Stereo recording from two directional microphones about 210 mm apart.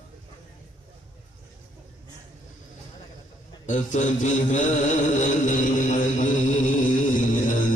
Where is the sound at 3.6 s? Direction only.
35° left (ahead or behind).